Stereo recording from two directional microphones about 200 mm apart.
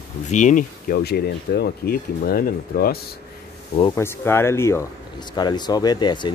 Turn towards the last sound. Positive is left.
turn(degrees=20)  # may be behind; listen again after turning